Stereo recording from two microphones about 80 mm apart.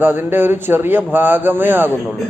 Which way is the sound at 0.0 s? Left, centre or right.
Right.